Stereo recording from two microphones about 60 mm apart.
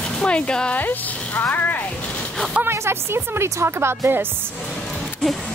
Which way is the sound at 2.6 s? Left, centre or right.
Right.